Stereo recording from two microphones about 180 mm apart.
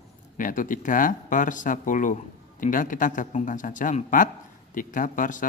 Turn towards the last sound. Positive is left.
turn(degrees=45)  # may be behind; listen again after turning